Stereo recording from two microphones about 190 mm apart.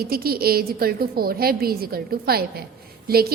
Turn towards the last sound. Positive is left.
turn(degrees=-55)  # may be behind; listen again after turning